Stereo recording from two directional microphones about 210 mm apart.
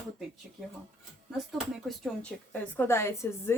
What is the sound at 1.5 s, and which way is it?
A woman's voice, centre (ahead or behind).